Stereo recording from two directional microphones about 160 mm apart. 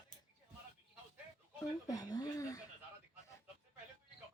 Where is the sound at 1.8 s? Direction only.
25° left (ahead or behind).